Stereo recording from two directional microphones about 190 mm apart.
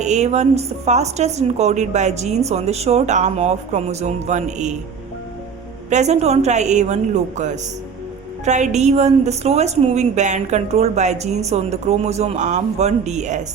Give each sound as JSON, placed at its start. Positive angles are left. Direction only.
{"t": 0.0, "sound": "a woman's voice", "side_deg": -35}
{"t": 5.9, "sound": "a woman's voice", "side_deg": -35}